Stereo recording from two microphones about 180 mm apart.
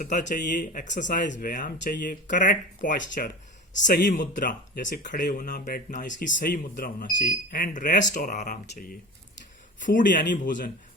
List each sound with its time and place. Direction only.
0.0 s speech: 45° left (ahead or behind)
6.2 s speech: 70° left (ahead or behind)
6.7 s speech: 50° left (ahead or behind)
8.6 s speech: 60° left (ahead or behind)
9.8 s speech: 50° left (ahead or behind)